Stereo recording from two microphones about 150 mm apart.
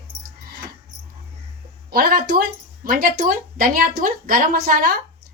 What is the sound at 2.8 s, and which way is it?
A woman's voice, 70° right (ahead or behind).